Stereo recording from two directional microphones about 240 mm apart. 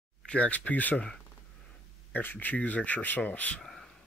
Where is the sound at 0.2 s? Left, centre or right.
Centre.